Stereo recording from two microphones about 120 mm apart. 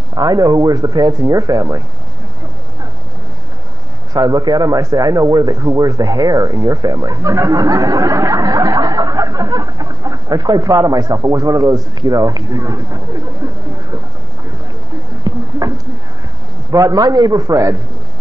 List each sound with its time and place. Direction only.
0.1 s speech: 30° right (ahead or behind)
4.1 s a man's voice: 30° right (ahead or behind)
15.3 s a sound: 35° right (ahead or behind)
16.7 s speech: 30° right (ahead or behind)